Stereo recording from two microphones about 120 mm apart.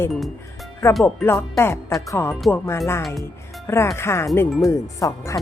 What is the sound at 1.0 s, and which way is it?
A woman's voice, 20° left (ahead or behind).